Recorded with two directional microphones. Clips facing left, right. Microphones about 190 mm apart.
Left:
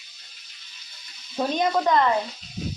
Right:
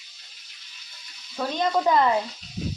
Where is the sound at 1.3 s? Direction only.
20° left (ahead or behind).